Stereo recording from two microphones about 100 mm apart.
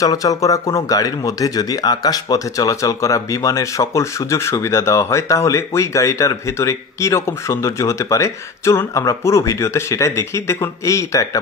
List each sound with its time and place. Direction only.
0.0 s speech: 35° left (ahead or behind)